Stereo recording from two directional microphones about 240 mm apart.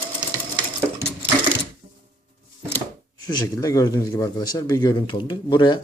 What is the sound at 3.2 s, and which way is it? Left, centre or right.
Speech, centre.